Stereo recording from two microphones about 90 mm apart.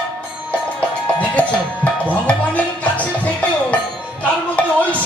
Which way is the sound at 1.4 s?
15° left (ahead or behind).